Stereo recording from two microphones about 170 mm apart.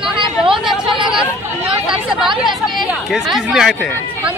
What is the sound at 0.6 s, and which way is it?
Chatter, 5° right (ahead or behind).